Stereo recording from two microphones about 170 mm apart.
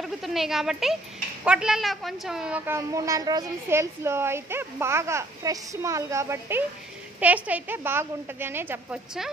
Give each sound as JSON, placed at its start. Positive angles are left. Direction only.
{"t": 0.0, "sound": "a woman's voice", "side_deg": 0}